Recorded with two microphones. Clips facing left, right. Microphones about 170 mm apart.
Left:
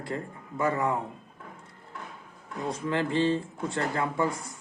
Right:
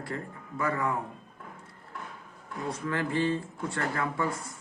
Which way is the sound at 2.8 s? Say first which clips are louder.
Left 3 dB; 25° left (ahead or behind).